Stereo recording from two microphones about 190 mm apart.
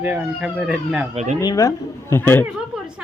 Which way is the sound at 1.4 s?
20° left (ahead or behind).